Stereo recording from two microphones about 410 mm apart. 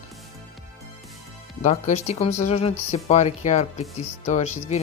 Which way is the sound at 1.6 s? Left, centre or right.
Centre.